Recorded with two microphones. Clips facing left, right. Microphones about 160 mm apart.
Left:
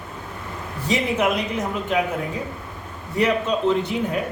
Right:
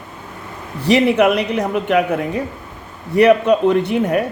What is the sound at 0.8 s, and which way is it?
A woman's voice, 70° right (ahead or behind).